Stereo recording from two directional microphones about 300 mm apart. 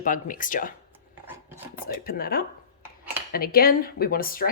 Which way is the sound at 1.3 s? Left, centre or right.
Centre.